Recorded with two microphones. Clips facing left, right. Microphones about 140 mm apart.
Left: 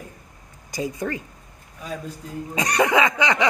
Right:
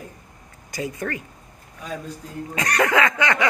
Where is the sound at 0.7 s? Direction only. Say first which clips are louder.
Left 1 dB; 15° left (ahead or behind).